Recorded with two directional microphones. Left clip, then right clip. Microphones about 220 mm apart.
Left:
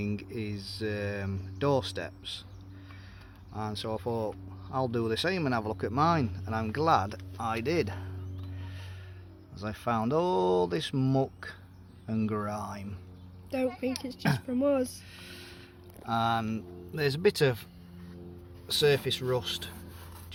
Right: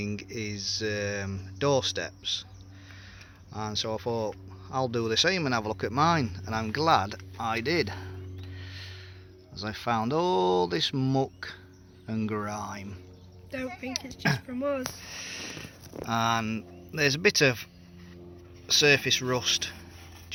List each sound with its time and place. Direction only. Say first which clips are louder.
0.0 s speech: right 2 dB; centre (ahead or behind)
3.5 s speech: right 3 dB; centre (ahead or behind)
8.6 s music: right 5 dB; 5° right (ahead or behind)
9.6 s speech: right 2 dB; centre (ahead or behind)
13.8 s speech: left 2 dB; 35° left (ahead or behind)
14.2 s speech: right 5 dB; centre (ahead or behind)
14.4 s speech: left 3 dB; 35° left (ahead or behind)
16.0 s speech: right 2 dB; 5° right (ahead or behind)
18.7 s speech: right 4 dB; 5° right (ahead or behind)